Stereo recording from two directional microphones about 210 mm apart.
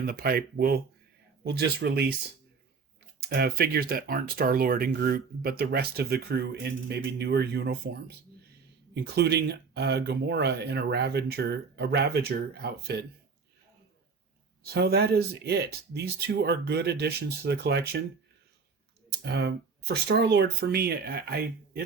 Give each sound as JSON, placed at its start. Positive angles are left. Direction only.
{"t": 0.0, "sound": "speech", "side_deg": -45}
{"t": 3.2, "sound": "speech", "side_deg": -50}
{"t": 9.1, "sound": "speech", "side_deg": -50}
{"t": 14.6, "sound": "speech", "side_deg": -50}
{"t": 19.2, "sound": "speech", "side_deg": -50}